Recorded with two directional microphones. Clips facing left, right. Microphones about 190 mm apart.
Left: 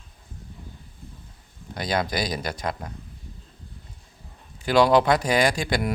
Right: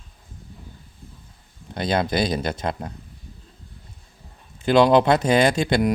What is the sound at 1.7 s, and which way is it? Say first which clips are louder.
Speech: right 4 dB; 25° right (ahead or behind).